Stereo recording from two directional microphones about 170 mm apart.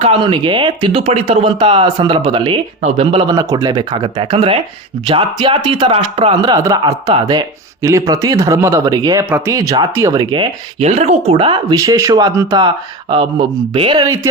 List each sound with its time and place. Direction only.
0.0 s speech: 30° right (ahead or behind)
11.7 s speech: 20° right (ahead or behind)